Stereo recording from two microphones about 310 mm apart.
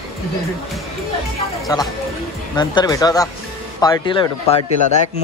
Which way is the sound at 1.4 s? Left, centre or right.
Centre.